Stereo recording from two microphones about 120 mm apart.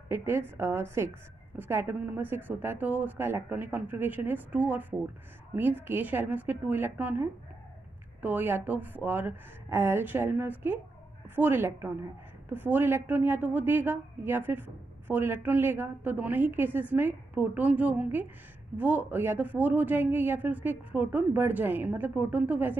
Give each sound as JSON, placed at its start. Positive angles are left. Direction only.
{"t": 0.1, "sound": "a woman's voice", "side_deg": -20}